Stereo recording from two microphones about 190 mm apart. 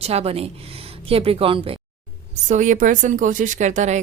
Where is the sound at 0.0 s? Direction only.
30° right (ahead or behind).